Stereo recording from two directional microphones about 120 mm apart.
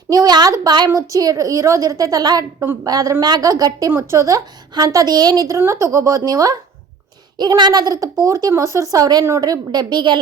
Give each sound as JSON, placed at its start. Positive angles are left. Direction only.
{"t": 0.1, "sound": "a woman's voice", "side_deg": -35}